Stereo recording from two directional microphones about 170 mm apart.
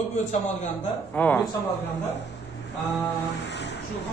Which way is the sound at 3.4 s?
90° left.